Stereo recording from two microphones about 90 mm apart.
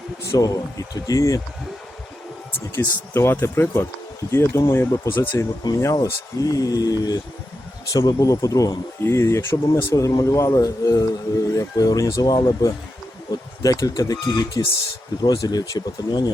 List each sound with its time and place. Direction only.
0.3 s speech: 40° left (ahead or behind)
2.7 s speech: 30° left (ahead or behind)
9.7 s speech: 45° left (ahead or behind)
13.6 s speech: 40° left (ahead or behind)